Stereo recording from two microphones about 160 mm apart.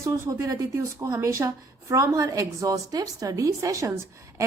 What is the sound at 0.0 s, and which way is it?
A woman's voice, 20° right (ahead or behind).